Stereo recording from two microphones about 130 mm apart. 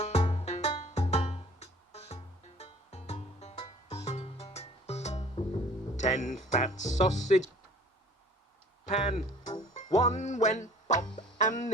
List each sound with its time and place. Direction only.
0.0 s music: 55° left (ahead or behind)
6.0 s speech: 65° left (ahead or behind)
8.9 s speech: 60° left (ahead or behind)
9.7 s music: 60° left (ahead or behind)